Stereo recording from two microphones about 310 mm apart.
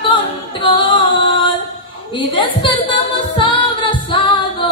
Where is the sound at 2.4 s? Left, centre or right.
Centre.